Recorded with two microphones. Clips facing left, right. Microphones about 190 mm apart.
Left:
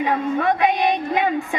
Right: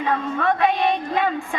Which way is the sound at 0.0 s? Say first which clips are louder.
Left 2 dB; 15° left (ahead or behind).